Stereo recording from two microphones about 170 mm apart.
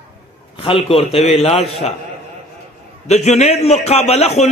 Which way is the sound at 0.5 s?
35° left (ahead or behind).